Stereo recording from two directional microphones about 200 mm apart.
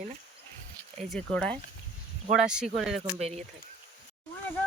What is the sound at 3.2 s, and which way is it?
Speech, 30° right (ahead or behind).